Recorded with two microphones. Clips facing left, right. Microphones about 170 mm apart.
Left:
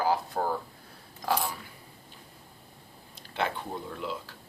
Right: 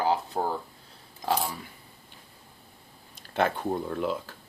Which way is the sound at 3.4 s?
45° right (ahead or behind).